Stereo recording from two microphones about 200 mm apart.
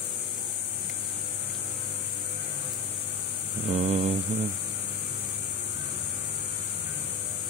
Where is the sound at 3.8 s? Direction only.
30° right (ahead or behind).